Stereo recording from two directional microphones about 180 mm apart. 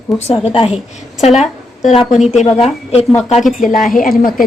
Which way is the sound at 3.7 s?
50° left (ahead or behind).